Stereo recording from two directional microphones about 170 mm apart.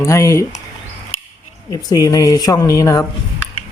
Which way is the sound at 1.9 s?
20° left (ahead or behind).